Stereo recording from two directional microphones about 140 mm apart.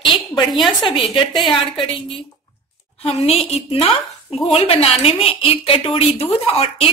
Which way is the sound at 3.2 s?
50° left (ahead or behind).